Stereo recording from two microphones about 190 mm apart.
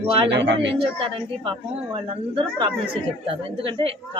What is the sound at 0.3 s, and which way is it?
Speech, 65° right (ahead or behind).